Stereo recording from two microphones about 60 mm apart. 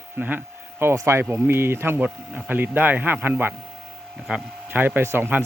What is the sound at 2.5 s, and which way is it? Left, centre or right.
Speech, right.